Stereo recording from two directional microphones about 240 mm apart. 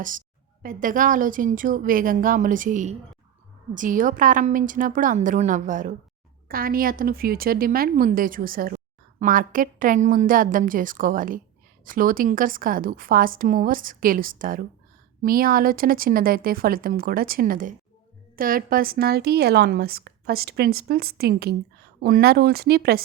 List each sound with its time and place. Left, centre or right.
0.6 s a woman's voice: right